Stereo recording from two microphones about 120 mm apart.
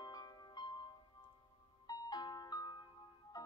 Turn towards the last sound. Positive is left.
turn(degrees=30)  # may be behind; listen again after turning